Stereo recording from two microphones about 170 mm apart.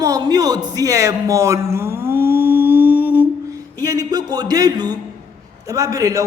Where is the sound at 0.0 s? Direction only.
20° right (ahead or behind).